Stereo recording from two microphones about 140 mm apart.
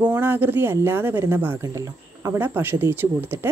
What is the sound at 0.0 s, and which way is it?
A woman's voice, 15° right (ahead or behind).